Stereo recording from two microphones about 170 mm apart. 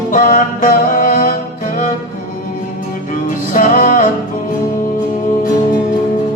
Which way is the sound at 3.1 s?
50° left (ahead or behind).